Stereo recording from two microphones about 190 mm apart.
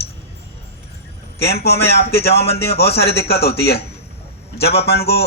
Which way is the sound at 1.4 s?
60° left (ahead or behind).